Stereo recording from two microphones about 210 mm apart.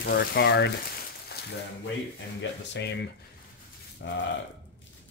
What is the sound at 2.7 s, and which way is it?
Speech, 55° left (ahead or behind).